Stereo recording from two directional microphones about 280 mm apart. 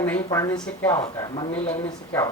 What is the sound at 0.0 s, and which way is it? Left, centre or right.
A woman's voice, centre.